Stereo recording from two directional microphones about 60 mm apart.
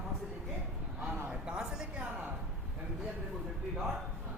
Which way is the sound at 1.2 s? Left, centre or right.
Centre.